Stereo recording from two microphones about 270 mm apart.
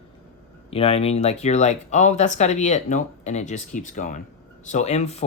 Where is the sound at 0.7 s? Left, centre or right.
Left.